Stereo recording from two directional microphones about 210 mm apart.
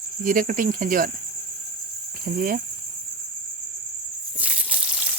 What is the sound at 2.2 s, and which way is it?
Speech, 40° right (ahead or behind).